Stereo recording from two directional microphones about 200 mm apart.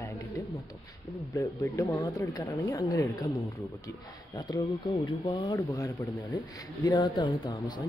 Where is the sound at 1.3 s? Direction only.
15° left (ahead or behind).